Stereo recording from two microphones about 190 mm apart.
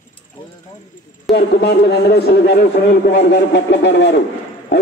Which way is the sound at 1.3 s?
60° left (ahead or behind).